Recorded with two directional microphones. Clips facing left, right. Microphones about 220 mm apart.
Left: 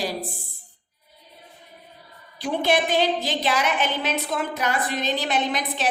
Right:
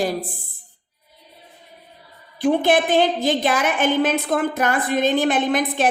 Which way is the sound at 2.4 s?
50° right (ahead or behind).